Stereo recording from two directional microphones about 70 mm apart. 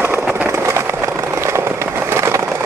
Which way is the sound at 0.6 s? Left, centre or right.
Right.